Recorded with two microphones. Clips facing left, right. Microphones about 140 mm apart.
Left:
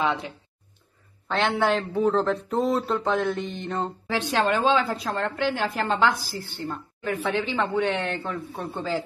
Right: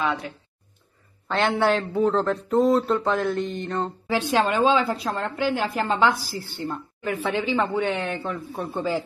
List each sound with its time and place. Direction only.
0.0 s speech: 25° left (ahead or behind)
1.2 s a man's voice: centre (ahead or behind)